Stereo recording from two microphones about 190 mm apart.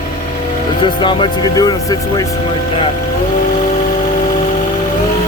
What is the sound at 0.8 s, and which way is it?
Speech, 25° left (ahead or behind).